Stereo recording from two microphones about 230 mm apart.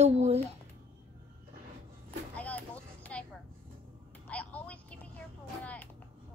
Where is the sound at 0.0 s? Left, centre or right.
Right.